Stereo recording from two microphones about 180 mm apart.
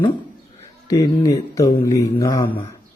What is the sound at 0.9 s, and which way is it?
A man's voice, 20° left (ahead or behind).